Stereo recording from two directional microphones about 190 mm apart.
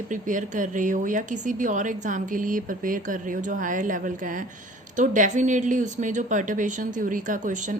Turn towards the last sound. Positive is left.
turn(degrees=-40)  # may be behind; listen again after turning